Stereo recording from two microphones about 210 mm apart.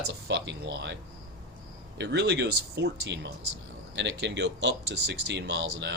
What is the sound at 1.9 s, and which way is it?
Speech, 55° right (ahead or behind).